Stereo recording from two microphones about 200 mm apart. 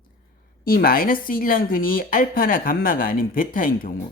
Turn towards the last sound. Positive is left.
turn(degrees=45)  # may be behind; listen again after turning